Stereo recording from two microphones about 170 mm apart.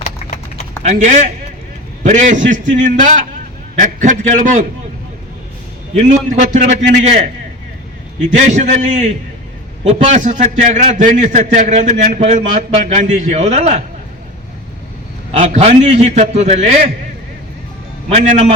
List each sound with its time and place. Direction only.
0.0 s a sound: 40° left (ahead or behind)
0.8 s a man's voice: 45° right (ahead or behind)
5.9 s a man's voice: 45° right (ahead or behind)
8.4 s a man's voice: 45° right (ahead or behind)
15.3 s a man's voice: 40° right (ahead or behind)
18.1 s a man's voice: 40° right (ahead or behind)